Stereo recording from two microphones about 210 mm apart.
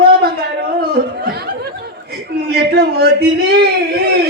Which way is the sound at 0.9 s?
50° right (ahead or behind).